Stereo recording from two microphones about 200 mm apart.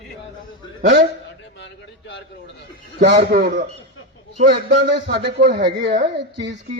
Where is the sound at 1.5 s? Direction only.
65° left (ahead or behind).